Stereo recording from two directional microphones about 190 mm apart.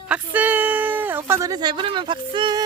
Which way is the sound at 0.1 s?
10° right (ahead or behind).